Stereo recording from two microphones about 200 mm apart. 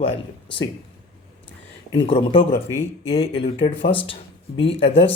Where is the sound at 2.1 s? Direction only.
25° left (ahead or behind).